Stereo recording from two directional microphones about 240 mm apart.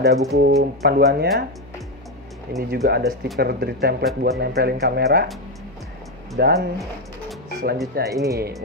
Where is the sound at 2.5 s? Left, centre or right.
Right.